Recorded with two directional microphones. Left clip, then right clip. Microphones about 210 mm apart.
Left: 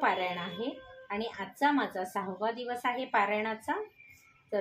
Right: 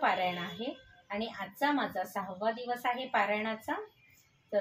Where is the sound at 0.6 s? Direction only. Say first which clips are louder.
Left 3 dB; 30° left (ahead or behind).